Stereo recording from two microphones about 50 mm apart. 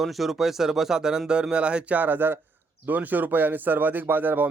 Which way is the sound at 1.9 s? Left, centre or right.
Right.